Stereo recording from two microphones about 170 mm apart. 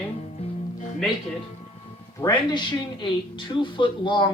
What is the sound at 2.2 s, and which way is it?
Speech, 25° left (ahead or behind).